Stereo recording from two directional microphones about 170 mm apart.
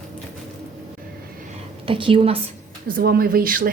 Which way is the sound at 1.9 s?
30° right (ahead or behind).